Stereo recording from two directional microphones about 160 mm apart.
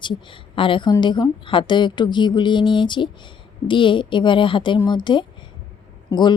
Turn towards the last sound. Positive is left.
turn(degrees=25)  # may be behind; listen again after turning